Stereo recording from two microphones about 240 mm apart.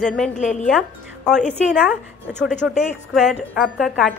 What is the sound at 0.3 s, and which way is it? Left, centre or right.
Speech, left.